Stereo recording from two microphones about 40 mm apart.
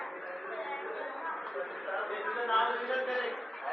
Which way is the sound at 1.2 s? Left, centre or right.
Centre.